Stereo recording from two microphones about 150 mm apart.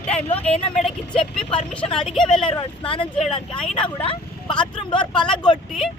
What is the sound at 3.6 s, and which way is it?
Speech, 5° left (ahead or behind).